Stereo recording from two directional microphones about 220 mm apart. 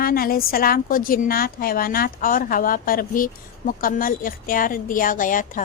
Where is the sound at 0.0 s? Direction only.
40° left (ahead or behind).